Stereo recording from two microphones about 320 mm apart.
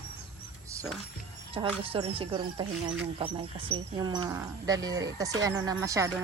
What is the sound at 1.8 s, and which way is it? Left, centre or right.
Speech, centre.